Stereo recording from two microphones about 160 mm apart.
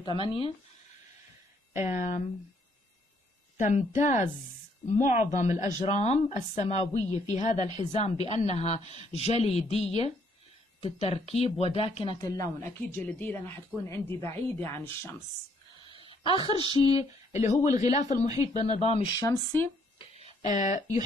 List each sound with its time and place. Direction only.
0.0 s speech: 30° left (ahead or behind)
1.9 s a woman's voice: 45° left (ahead or behind)
3.5 s a woman's voice: 50° left (ahead or behind); by 15.2 s 15° left (ahead or behind)
15.8 s a sound: 35° left (ahead or behind)
16.4 s a sound: 30° right (ahead or behind)
16.7 s speech: 40° left (ahead or behind)
17.6 s a sound: 25° right (ahead or behind)
17.9 s a woman's voice: 50° left (ahead or behind)
19.1 s speech: 20° left (ahead or behind)
20.4 s a woman's voice: 50° left (ahead or behind)